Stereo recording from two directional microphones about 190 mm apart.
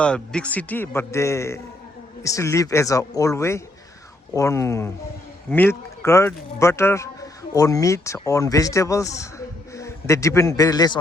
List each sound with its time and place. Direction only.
0.0 s a man's voice: 5° left (ahead or behind)